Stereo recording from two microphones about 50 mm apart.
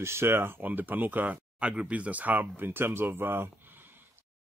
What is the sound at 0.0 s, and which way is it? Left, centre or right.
Speech, right.